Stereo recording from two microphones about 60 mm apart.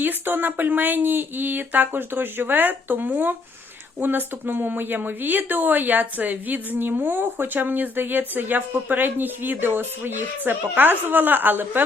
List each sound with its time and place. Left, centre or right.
0.0 s speech: right